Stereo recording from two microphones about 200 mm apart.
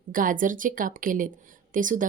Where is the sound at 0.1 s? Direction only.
40° right (ahead or behind).